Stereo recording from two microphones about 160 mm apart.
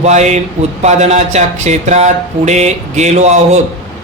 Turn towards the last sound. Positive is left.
turn(degrees=-45)  # may be behind; listen again after turning